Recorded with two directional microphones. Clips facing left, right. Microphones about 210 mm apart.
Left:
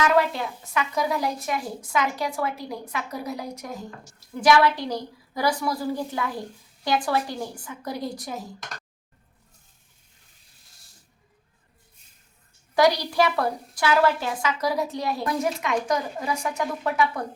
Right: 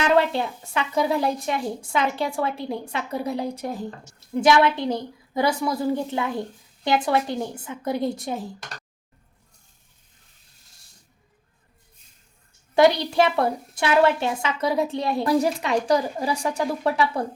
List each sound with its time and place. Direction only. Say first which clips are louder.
0.0 s a woman's voice: right 2 dB; 25° right (ahead or behind)
12.7 s a woman's voice: right 3 dB; 25° right (ahead or behind)